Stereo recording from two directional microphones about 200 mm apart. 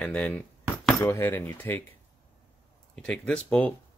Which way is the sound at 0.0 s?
5° left (ahead or behind).